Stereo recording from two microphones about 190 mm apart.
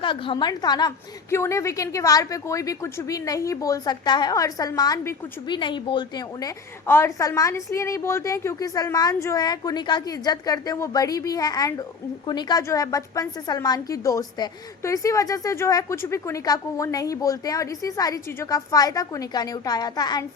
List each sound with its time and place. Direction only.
0.0 s a woman's voice: 25° left (ahead or behind)